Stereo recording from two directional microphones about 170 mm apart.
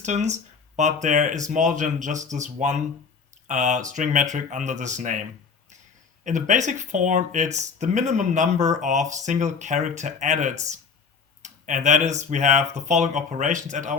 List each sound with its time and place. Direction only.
0.0 s speech: 45° right (ahead or behind)
6.2 s speech: 45° right (ahead or behind)